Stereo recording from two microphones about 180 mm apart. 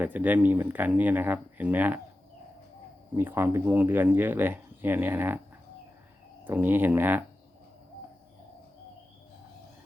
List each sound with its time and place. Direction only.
0.0 s speech: 10° right (ahead or behind)
3.2 s speech: 10° right (ahead or behind)
6.4 s speech: 10° right (ahead or behind)